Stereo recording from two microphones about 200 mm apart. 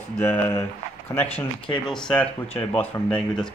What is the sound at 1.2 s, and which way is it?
Speech, 30° left (ahead or behind).